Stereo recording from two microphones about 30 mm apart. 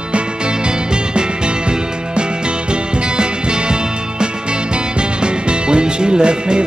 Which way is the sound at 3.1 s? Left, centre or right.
Right.